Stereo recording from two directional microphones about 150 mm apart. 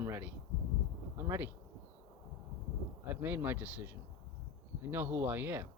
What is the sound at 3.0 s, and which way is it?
Speech, 10° right (ahead or behind).